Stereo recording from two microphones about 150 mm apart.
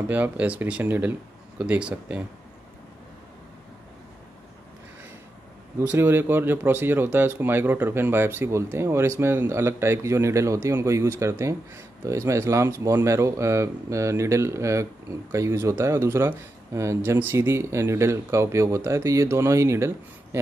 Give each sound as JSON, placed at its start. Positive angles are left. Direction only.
{"t": 0.1, "sound": "speech", "side_deg": -10}
{"t": 5.8, "sound": "speech", "side_deg": -15}